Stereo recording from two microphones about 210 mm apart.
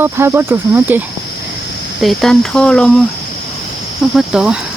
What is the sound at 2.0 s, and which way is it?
Cricket, centre (ahead or behind).